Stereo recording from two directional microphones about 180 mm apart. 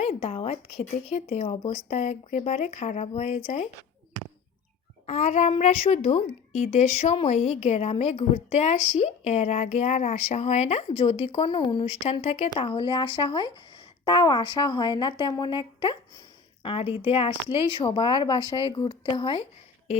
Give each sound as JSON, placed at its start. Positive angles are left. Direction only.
{"t": 0.0, "sound": "a woman's voice", "side_deg": 35}
{"t": 5.0, "sound": "a woman's voice", "side_deg": 40}